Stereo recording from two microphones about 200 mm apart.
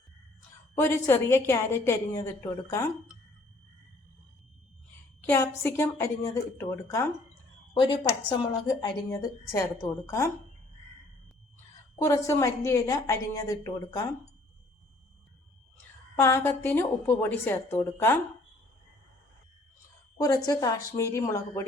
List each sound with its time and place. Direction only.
0.8 s a woman's voice: 15° left (ahead or behind)
5.2 s a woman's voice: 10° left (ahead or behind)
11.9 s a woman's voice: 15° left (ahead or behind)
16.1 s a woman's voice: 15° left (ahead or behind)
20.1 s a woman's voice: 20° left (ahead or behind)